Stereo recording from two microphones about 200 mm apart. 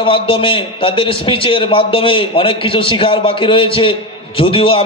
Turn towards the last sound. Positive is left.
turn(degrees=25)  # may be behind; listen again after turning